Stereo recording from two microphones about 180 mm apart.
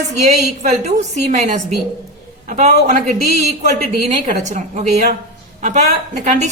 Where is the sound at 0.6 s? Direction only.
40° right (ahead or behind).